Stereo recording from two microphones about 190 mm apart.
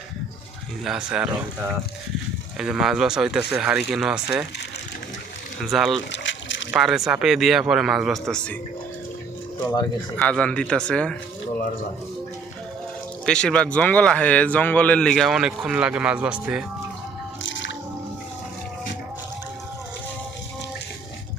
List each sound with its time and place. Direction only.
0.9 s speech: 5° right (ahead or behind)
2.6 s speech: 5° right (ahead or behind)
5.6 s speech: centre (ahead or behind)
6.0 s a sound: 75° left (ahead or behind)
6.7 s speech: centre (ahead or behind)
10.2 s speech: 5° left (ahead or behind)
13.2 s speech: 5° left (ahead or behind)
17.4 s music: 75° left (ahead or behind)